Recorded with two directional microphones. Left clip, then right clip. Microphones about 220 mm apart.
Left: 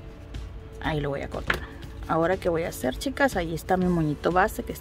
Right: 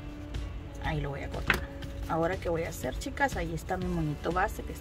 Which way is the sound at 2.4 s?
50° left (ahead or behind).